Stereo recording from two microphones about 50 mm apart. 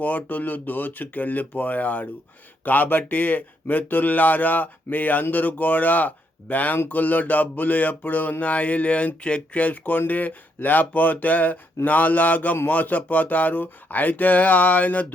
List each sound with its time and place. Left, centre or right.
0.0 s speech: left